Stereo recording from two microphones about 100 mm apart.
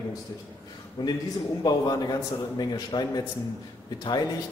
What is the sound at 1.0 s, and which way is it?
A man's voice, 50° left (ahead or behind).